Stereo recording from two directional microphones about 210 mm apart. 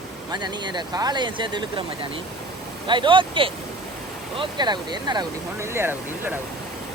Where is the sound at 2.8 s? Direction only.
20° right (ahead or behind).